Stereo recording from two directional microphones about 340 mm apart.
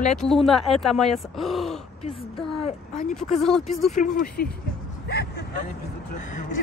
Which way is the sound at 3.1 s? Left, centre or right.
Centre.